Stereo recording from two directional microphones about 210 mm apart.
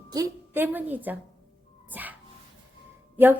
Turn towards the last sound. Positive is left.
turn(degrees=-10)  # may be behind; listen again after turning